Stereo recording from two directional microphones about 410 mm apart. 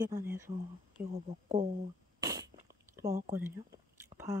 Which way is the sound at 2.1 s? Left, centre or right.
Centre.